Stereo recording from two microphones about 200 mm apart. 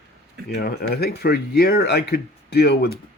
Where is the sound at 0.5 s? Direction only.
50° left (ahead or behind).